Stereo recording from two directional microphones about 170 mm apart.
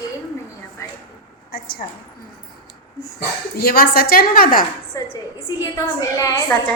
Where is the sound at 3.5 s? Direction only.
65° left (ahead or behind).